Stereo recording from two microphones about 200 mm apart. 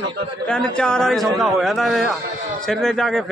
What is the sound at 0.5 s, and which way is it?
Speech, 5° left (ahead or behind).